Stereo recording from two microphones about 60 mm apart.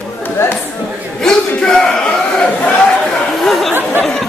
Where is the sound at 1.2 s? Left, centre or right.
Centre.